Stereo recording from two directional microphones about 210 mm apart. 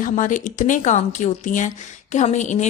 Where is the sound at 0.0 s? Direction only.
40° left (ahead or behind).